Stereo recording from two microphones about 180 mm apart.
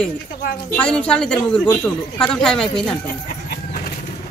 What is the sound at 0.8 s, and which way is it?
Speech, 5° left (ahead or behind).